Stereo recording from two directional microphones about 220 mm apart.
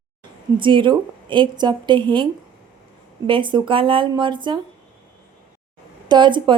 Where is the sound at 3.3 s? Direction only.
20° right (ahead or behind).